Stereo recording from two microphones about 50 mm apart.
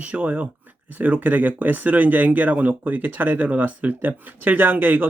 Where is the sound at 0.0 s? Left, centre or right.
Right.